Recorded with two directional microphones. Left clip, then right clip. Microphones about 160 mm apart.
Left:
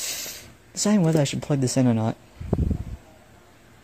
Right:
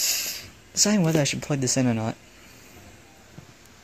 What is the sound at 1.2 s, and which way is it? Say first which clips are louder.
Speech: even; 20° left (ahead or behind).